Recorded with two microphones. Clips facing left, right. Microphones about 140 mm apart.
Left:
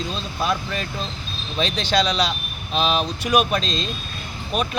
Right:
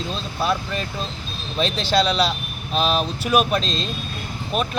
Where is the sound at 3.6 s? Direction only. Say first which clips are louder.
Even; 35° right (ahead or behind).